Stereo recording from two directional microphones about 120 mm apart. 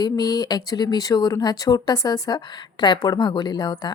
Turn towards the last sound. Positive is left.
turn(degrees=35)  # may be behind; listen again after turning